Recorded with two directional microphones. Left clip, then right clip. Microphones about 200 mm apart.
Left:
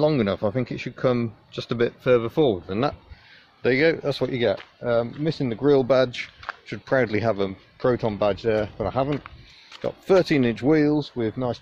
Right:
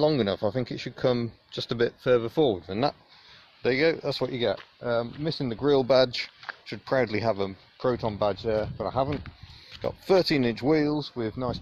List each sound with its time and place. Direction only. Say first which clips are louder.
0.0 s speech: left 2 dB; 30° right (ahead or behind)
9.1 s a sound: left 5 dB; centre (ahead or behind)
9.8 s speech: left 3 dB; 30° right (ahead or behind)